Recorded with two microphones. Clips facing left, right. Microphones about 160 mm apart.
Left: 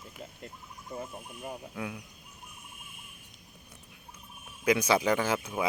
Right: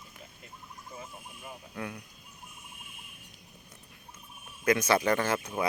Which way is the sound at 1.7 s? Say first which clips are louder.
Left 1 dB; 5° left (ahead or behind).